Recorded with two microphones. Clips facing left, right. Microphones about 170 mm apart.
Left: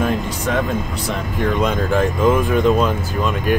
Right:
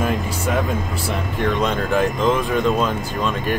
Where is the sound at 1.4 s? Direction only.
5° left (ahead or behind).